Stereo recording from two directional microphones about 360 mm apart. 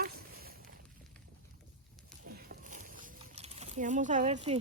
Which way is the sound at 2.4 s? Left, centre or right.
Right.